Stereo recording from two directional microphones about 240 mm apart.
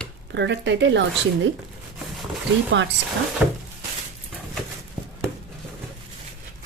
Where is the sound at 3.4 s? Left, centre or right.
Centre.